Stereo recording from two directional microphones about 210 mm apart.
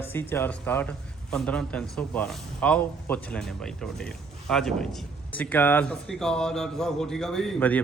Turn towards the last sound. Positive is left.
turn(degrees=5)  # may be behind; listen again after turning